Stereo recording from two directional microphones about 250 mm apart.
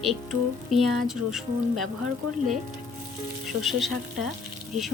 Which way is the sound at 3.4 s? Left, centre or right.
Centre.